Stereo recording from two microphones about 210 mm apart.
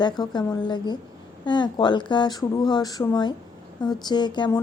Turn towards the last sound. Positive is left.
turn(degrees=20)  # may be behind; listen again after turning